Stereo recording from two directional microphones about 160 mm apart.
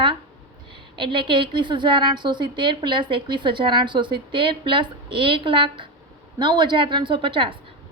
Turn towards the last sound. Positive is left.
turn(degrees=-35)  # may be behind; listen again after turning